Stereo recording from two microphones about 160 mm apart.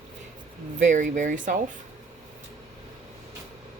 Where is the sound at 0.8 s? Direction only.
50° right (ahead or behind).